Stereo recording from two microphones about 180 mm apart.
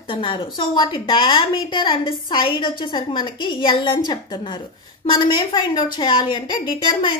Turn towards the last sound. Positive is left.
turn(degrees=25)  # may be behind; listen again after turning